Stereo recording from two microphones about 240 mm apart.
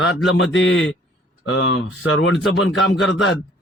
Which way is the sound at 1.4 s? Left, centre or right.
Left.